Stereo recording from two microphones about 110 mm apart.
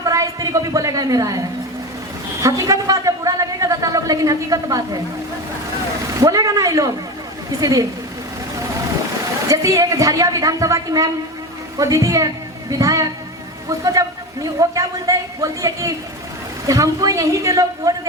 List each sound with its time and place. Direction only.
0.0 s a sound: 30° right (ahead or behind)
6.1 s a man's voice: 30° right (ahead or behind)
9.5 s a woman's voice: 30° right (ahead or behind)